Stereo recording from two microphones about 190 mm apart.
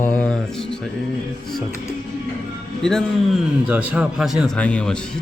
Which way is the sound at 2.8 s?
5° left (ahead or behind).